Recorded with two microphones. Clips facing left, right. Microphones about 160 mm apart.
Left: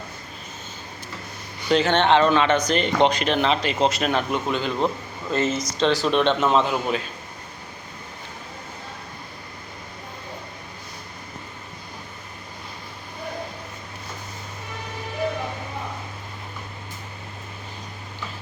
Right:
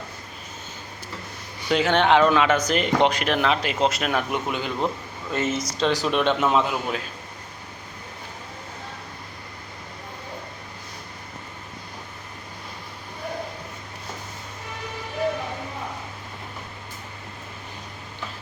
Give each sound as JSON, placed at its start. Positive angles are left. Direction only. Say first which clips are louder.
{"t": 1.7, "sound": "speech", "louder": "left 1 dB", "side_deg": -5}
{"t": 4.3, "sound": "speech", "louder": "left 2 dB", "side_deg": -15}